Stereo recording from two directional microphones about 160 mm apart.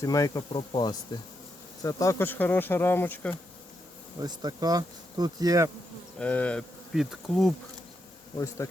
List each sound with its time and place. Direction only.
0.0 s speech: 20° left (ahead or behind)
4.2 s bee: 25° right (ahead or behind)
6.1 s insect: 10° left (ahead or behind)
8.4 s speech: 20° left (ahead or behind)